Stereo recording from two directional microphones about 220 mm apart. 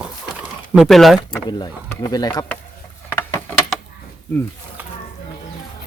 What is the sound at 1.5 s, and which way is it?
Speech, 20° left (ahead or behind).